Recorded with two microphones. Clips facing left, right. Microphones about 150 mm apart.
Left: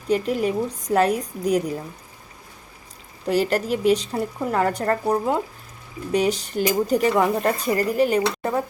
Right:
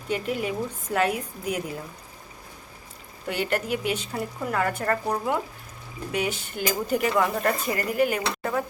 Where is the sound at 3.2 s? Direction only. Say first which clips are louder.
Left 6 dB; 35° left (ahead or behind).